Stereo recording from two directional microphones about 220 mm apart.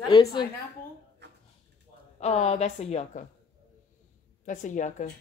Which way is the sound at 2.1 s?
30° left (ahead or behind).